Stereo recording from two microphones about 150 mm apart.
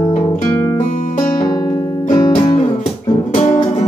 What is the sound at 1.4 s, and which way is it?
Music, 30° left (ahead or behind).